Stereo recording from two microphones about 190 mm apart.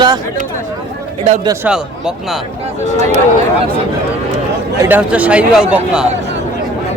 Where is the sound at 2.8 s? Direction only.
35° right (ahead or behind).